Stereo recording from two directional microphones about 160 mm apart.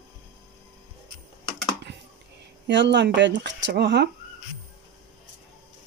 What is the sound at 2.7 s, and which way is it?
Speech, 90° right.